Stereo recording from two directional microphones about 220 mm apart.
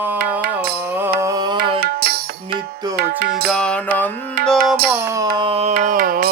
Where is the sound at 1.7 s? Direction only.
45° right (ahead or behind).